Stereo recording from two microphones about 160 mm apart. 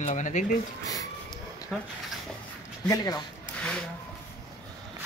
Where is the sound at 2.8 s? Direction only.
25° left (ahead or behind).